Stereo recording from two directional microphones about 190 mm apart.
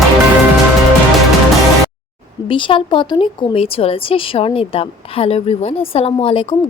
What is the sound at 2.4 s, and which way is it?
A woman's voice, 25° left (ahead or behind).